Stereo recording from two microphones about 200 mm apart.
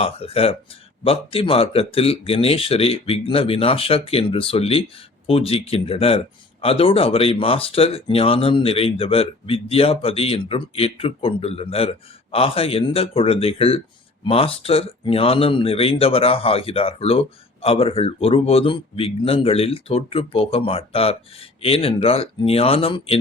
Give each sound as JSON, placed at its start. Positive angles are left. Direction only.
{"t": 0.0, "sound": "speech", "side_deg": 30}